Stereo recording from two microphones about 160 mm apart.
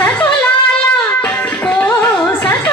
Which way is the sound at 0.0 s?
10° left (ahead or behind).